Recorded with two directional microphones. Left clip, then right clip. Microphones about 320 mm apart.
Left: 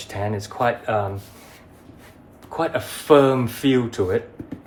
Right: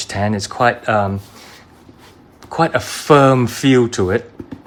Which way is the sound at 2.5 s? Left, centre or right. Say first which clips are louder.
Right 7 dB; right.